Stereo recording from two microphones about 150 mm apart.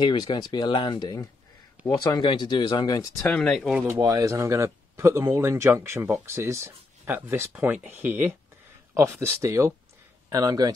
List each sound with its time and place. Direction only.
0.0 s speech: 30° left (ahead or behind)
3.3 s speech: 5° left (ahead or behind)
4.0 s speech: 25° right (ahead or behind)